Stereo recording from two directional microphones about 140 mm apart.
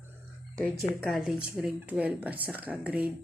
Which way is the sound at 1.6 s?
10° right (ahead or behind).